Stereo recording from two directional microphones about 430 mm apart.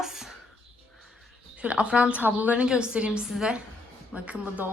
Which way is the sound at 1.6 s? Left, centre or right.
Centre.